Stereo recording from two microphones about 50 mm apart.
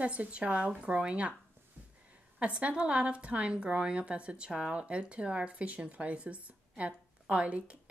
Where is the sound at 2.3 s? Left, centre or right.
Right.